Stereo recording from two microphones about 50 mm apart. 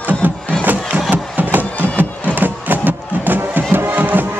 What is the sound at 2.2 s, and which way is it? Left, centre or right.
Music, right.